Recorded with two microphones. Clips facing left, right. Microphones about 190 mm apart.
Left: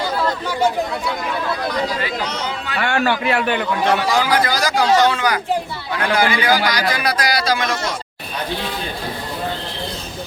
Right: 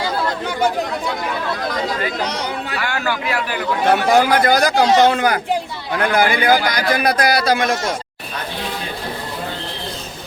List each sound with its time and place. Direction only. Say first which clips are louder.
2.7 s a man's voice: left 6 dB; 30° left (ahead or behind)
3.8 s a man's voice: right 5 dB; 55° right (ahead or behind)